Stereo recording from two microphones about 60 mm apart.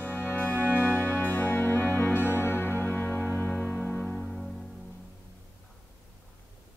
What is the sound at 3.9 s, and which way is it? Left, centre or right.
Music, centre.